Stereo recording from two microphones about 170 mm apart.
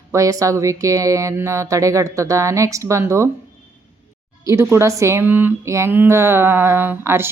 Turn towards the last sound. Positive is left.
turn(degrees=-15)  # may be behind; listen again after turning